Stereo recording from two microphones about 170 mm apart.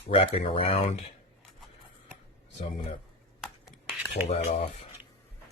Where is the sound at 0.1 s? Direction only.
35° left (ahead or behind).